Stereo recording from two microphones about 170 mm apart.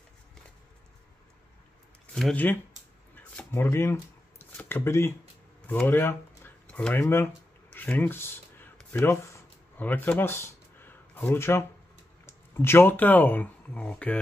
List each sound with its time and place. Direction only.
2.1 s speech: 5° left (ahead or behind)
3.5 s speech: 15° left (ahead or behind)
7.7 s a sound: 10° left (ahead or behind)
12.3 s speech: 15° left (ahead or behind)